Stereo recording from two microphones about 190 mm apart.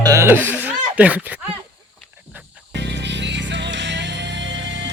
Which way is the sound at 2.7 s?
65° right (ahead or behind).